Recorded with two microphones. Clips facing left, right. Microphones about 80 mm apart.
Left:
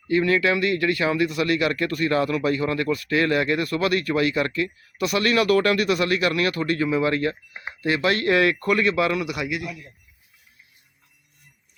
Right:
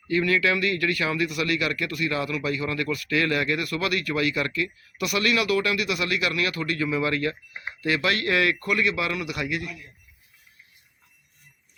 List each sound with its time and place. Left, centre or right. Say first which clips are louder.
0.1 s speech: left 3 dB; left; by 9.7 s centre